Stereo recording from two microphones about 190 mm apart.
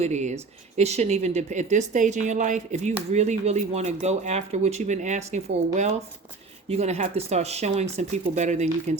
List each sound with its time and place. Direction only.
0.0 s speech: 40° right (ahead or behind)